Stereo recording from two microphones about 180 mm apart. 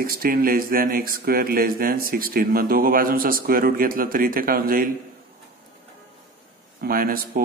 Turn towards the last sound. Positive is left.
turn(degrees=-55)  # may be behind; listen again after turning